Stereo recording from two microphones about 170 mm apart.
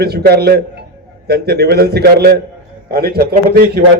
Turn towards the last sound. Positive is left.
turn(degrees=-65)  # may be behind; listen again after turning